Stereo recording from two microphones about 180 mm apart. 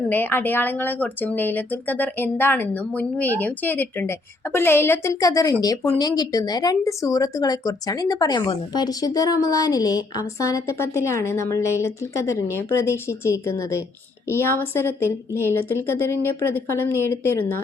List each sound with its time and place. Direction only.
0.1 s speech: 10° left (ahead or behind)